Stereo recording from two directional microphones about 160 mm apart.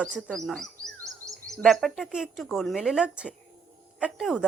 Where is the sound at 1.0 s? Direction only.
20° right (ahead or behind).